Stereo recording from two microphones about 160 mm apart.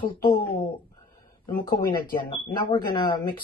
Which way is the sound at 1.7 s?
30° left (ahead or behind).